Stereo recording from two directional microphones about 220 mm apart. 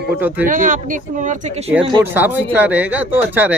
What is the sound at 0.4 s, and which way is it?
Speech, 35° right (ahead or behind).